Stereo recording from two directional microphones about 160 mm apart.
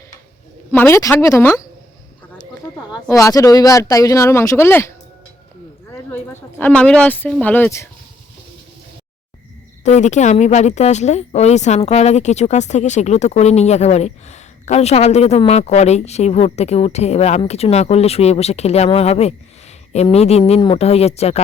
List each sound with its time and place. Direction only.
0.7 s speech: 15° left (ahead or behind)
3.1 s speech: 20° left (ahead or behind)
6.6 s speech: 10° left (ahead or behind)
9.8 s a woman's voice: 45° left (ahead or behind)